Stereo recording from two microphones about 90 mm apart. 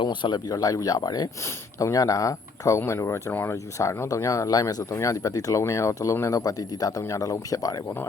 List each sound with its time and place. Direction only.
0.0 s speech: 60° left (ahead or behind); by 7.8 s 40° left (ahead or behind)